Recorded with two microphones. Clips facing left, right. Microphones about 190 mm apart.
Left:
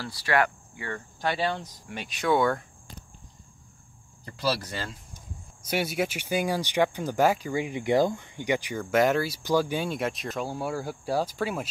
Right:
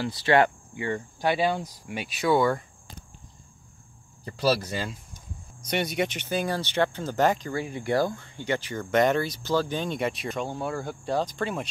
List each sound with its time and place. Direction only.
0.0 s speech: 25° right (ahead or behind); by 2.6 s centre (ahead or behind)
4.2 s speech: 25° right (ahead or behind)
5.7 s speech: 5° left (ahead or behind)